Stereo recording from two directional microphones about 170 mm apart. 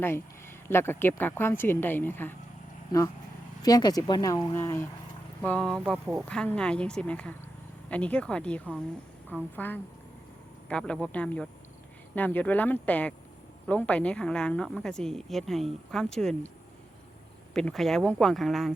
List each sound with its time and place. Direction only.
0.0 s speech: 15° left (ahead or behind)
3.6 s a woman's voice: 25° left (ahead or behind); by 16.5 s 5° left (ahead or behind)
17.5 s a woman's voice: 5° left (ahead or behind)